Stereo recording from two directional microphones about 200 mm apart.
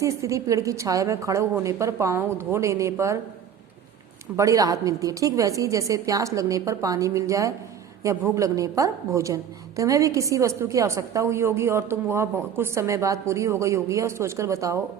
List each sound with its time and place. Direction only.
0.0 s a woman's voice: 15° right (ahead or behind)
4.4 s a woman's voice: 15° right (ahead or behind)